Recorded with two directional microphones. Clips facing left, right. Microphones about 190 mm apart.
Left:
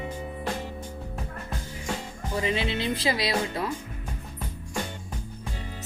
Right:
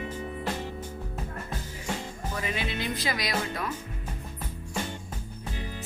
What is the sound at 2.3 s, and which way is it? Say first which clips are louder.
Speech: left 6 dB; 25° left (ahead or behind).